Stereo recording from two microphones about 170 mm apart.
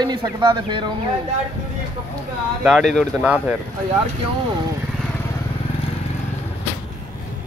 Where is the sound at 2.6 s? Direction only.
Centre (ahead or behind).